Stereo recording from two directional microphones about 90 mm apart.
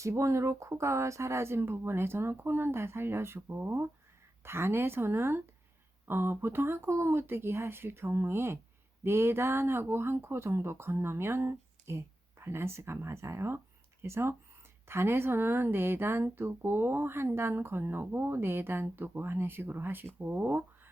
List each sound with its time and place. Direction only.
0.0 s speech: 35° right (ahead or behind)